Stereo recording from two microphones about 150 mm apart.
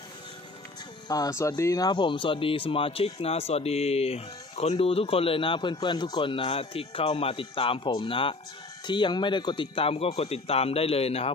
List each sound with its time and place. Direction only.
1.0 s speech: 25° left (ahead or behind); by 11.3 s 40° left (ahead or behind)